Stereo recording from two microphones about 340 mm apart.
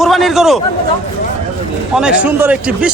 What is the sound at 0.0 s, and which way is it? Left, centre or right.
Speech, centre.